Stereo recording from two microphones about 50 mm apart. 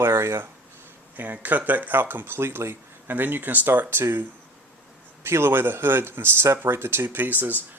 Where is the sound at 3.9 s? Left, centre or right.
Right.